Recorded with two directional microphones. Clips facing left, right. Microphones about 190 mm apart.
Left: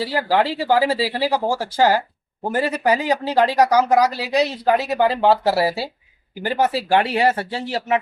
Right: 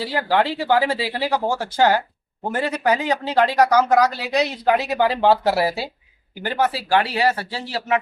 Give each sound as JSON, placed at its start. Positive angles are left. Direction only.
{"t": 0.1, "sound": "a man's voice", "side_deg": 5}
{"t": 3.3, "sound": "speech", "side_deg": 35}
{"t": 3.6, "sound": "a man's voice", "side_deg": 15}
{"t": 6.9, "sound": "speech", "side_deg": 20}